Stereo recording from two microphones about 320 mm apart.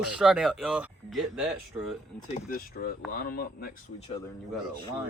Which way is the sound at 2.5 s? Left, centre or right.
Left.